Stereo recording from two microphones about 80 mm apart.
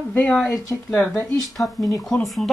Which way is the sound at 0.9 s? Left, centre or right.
Left.